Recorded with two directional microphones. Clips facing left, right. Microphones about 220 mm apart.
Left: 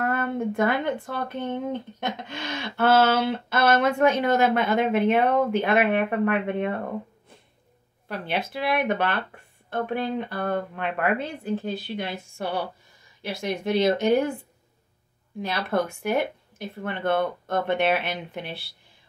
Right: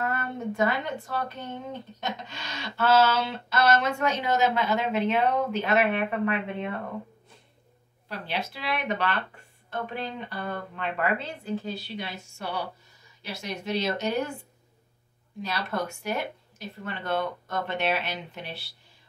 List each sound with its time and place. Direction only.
0.0 s speech: 50° left (ahead or behind)
8.1 s speech: 55° left (ahead or behind)
15.4 s speech: 55° left (ahead or behind)